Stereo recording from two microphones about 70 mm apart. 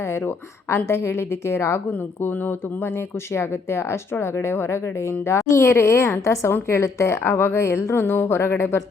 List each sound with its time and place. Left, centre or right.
0.0 s speech: left